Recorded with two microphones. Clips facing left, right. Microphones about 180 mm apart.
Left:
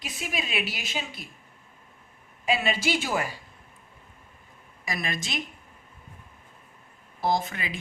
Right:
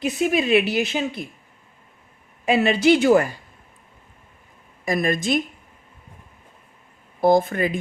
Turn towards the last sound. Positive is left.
turn(degrees=-50)  # may be behind; listen again after turning